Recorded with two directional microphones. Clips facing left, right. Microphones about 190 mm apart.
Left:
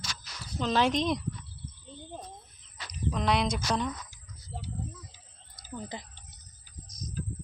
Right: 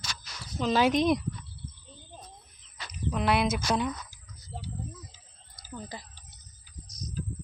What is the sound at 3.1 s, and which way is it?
Speech, 5° right (ahead or behind).